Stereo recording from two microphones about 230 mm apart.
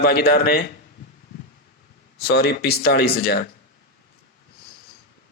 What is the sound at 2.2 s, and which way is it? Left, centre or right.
A man's voice, left.